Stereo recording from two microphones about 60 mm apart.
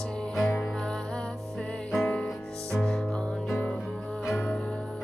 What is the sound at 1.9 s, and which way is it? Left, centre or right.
Music, centre.